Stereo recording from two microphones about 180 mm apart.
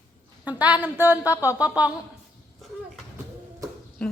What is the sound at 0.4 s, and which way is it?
Speech, 10° right (ahead or behind).